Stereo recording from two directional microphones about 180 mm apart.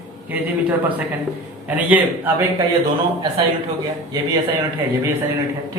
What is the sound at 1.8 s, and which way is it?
Speech, 10° right (ahead or behind).